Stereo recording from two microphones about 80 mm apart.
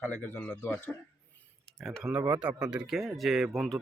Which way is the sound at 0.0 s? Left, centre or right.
Left.